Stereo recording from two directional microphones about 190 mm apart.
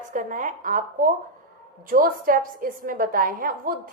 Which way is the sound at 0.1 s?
45° right (ahead or behind).